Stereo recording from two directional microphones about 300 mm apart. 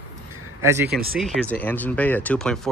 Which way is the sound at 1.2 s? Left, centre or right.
Centre.